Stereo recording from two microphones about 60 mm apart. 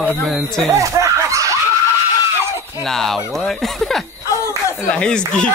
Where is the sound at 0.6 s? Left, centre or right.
Right.